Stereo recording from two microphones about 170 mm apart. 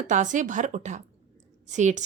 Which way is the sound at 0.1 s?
45° right (ahead or behind).